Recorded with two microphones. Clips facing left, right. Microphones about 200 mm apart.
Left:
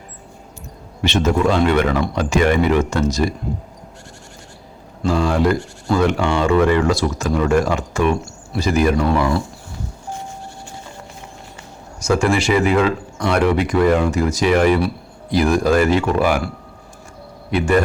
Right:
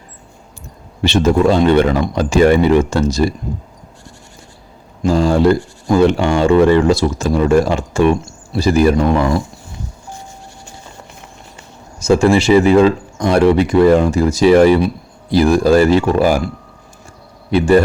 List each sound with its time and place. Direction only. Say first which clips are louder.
1.0 s speech: right 5 dB; 30° right (ahead or behind)
5.0 s speech: right 5 dB; 30° right (ahead or behind)
9.0 s speech: right 3 dB; 20° right (ahead or behind)
11.9 s speech: right 6 dB; 25° right (ahead or behind)
17.5 s speech: right 5 dB; 30° right (ahead or behind)